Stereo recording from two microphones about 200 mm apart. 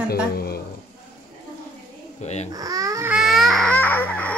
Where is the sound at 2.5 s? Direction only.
15° right (ahead or behind).